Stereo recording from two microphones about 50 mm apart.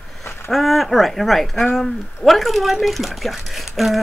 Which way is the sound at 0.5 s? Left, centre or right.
Centre.